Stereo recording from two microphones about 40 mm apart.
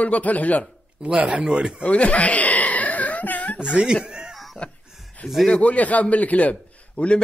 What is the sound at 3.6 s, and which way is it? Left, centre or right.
Speech, right.